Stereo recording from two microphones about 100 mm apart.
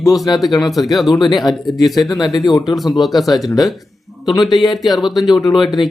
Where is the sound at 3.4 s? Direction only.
35° left (ahead or behind).